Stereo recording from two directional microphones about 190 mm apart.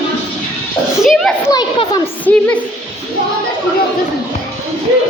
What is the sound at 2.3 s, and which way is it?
Speech, 10° left (ahead or behind).